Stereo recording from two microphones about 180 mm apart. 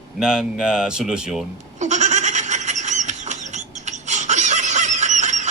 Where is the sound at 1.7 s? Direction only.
40° right (ahead or behind).